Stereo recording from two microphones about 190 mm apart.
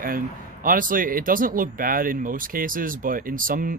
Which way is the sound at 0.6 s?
45° right (ahead or behind).